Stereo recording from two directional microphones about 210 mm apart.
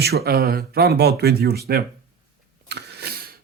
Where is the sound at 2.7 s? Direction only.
50° right (ahead or behind).